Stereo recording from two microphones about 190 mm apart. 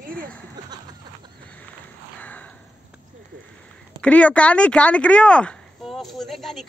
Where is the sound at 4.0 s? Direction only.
5° left (ahead or behind).